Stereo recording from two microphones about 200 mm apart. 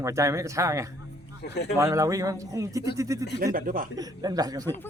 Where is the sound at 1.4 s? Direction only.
55° left (ahead or behind).